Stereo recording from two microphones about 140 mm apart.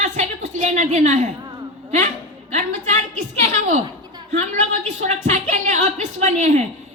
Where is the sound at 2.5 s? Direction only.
55° right (ahead or behind).